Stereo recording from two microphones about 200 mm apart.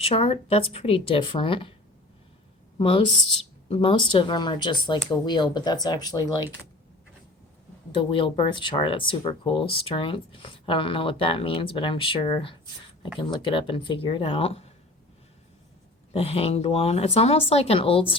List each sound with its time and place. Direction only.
0.0 s speech: 30° left (ahead or behind)
2.7 s a woman's voice: 25° left (ahead or behind)
7.9 s speech: 25° left (ahead or behind)
16.1 s speech: 30° left (ahead or behind)